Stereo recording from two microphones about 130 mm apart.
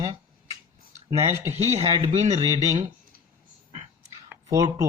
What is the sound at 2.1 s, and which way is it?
Speech, 70° right (ahead or behind).